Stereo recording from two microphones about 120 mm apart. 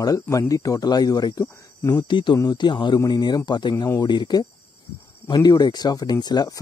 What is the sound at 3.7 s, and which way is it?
Speech, 20° left (ahead or behind).